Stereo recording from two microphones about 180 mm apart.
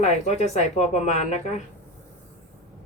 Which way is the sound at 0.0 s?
40° left (ahead or behind).